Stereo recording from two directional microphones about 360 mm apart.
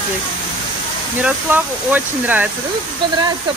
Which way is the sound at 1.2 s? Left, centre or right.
Centre.